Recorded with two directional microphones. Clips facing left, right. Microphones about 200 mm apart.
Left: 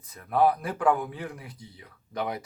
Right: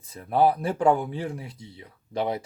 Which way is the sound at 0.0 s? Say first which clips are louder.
Right 2 dB; 30° right (ahead or behind).